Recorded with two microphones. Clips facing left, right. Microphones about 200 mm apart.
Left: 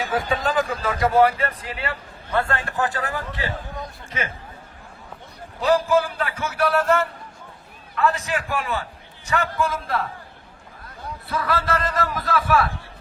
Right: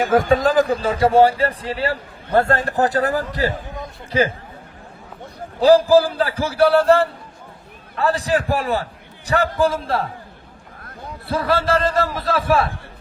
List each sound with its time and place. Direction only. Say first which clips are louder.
0.0 s a man's voice: right 8 dB; 45° right (ahead or behind)
5.5 s a man's voice: right 7 dB; 30° right (ahead or behind)
11.3 s a man's voice: right 5 dB; 30° right (ahead or behind)